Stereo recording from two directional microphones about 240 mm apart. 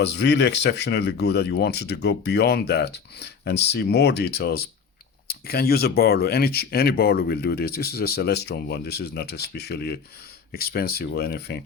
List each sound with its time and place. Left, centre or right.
0.0 s speech: left